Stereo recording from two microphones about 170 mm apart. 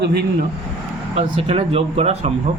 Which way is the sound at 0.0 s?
70° right (ahead or behind).